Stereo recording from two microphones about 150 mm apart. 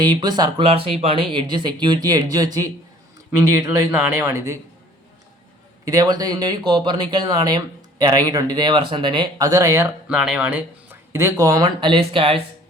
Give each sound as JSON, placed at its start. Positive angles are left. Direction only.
{"t": 0.0, "sound": "speech", "side_deg": -30}
{"t": 0.9, "sound": "speech", "side_deg": -40}
{"t": 5.8, "sound": "speech", "side_deg": -25}
{"t": 9.5, "sound": "speech", "side_deg": -20}
{"t": 10.1, "sound": "speech", "side_deg": -5}
{"t": 11.8, "sound": "speech", "side_deg": -35}